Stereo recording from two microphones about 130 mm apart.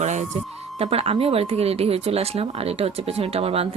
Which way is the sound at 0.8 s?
50° right (ahead or behind).